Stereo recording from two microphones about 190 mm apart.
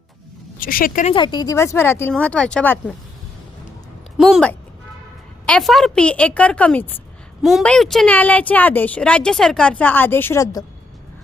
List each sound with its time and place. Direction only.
0.6 s speech: 50° left (ahead or behind)
1.1 s speech: 25° left (ahead or behind); by 2.9 s 5° left (ahead or behind)
4.2 s a woman's voice: centre (ahead or behind)